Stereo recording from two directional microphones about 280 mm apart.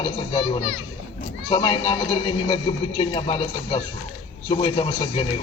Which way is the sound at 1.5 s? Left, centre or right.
Centre.